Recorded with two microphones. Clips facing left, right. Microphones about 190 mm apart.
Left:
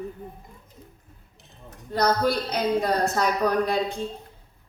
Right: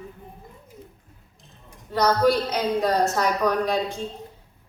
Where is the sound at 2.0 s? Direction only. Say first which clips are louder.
Right 3 dB; 55° left (ahead or behind).